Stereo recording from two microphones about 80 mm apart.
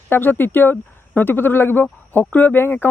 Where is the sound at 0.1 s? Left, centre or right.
Left.